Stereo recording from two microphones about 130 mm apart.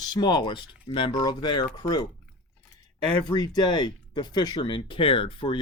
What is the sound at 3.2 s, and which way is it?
Speech, 30° left (ahead or behind).